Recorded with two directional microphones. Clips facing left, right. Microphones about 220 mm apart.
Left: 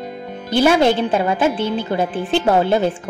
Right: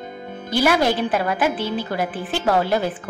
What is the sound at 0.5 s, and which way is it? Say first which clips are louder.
A woman's voice: left 4 dB; 25° left (ahead or behind).